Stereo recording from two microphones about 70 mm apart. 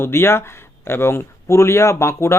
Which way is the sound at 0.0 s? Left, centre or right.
Left.